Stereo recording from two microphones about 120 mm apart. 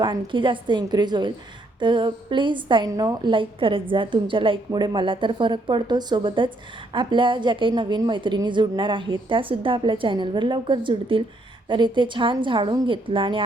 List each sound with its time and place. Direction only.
0.0 s a woman's voice: 40° right (ahead or behind)
2.9 s a woman's voice: 30° right (ahead or behind)
3.3 s a woman's voice: 45° right (ahead or behind)